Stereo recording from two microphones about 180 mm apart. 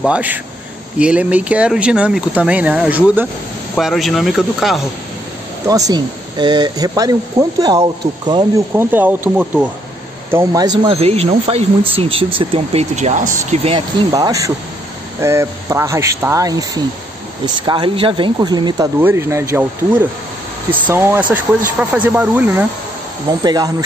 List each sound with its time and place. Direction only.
0.0 s speech: 10° right (ahead or behind)
5.7 s speech: 20° right (ahead or behind)
8.7 s speech: 10° right (ahead or behind)
10.3 s speech: 20° right (ahead or behind)
11.0 s speech: 35° right (ahead or behind)
13.7 s speech: 25° right (ahead or behind)
18.9 s speech: 15° right (ahead or behind)
23.4 s speech: 20° right (ahead or behind)